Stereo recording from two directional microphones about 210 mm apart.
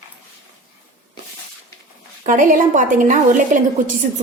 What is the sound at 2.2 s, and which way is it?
A woman's voice, 40° right (ahead or behind).